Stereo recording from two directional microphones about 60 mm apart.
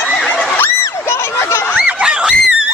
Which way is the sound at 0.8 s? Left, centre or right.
Left.